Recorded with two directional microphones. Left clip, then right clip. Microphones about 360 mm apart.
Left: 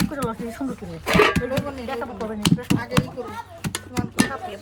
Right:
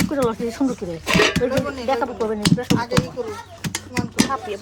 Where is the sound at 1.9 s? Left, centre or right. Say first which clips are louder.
Right 10 dB; centre.